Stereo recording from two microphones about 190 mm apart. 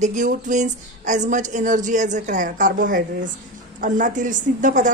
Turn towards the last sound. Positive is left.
turn(degrees=-40)  # may be behind; listen again after turning